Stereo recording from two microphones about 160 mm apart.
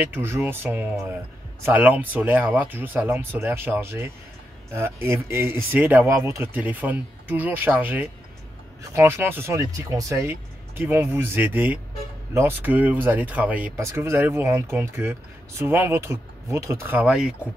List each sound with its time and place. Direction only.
0.0 s speech: 15° right (ahead or behind)